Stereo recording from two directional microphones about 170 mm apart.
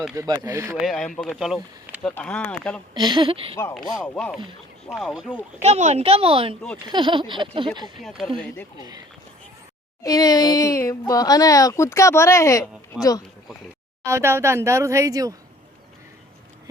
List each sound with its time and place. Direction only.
0.2 s speech: 15° right (ahead or behind)
0.8 s speech: centre (ahead or behind)
2.9 s a sound: 25° right (ahead or behind)
3.8 s speech: 5° left (ahead or behind)
5.6 s a woman's voice: 40° right (ahead or behind)
6.8 s a sound: 30° right (ahead or behind)
10.0 s speech: 20° left (ahead or behind)
14.0 s speech: 15° right (ahead or behind)